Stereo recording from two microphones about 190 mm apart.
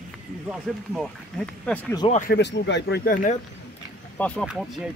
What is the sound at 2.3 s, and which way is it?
Speech, 65° left (ahead or behind).